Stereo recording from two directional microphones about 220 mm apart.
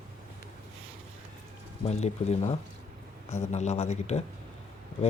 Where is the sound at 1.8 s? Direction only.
30° left (ahead or behind).